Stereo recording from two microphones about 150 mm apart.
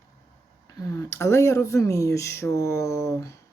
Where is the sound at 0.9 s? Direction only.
20° left (ahead or behind).